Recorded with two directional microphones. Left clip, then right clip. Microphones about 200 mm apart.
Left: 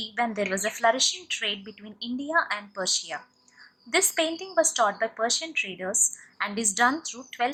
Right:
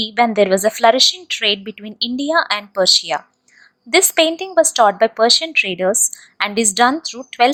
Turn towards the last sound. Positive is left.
turn(degrees=-35)  # may be behind; listen again after turning